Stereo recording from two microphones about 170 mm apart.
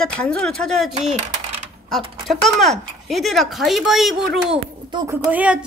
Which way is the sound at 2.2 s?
Centre (ahead or behind).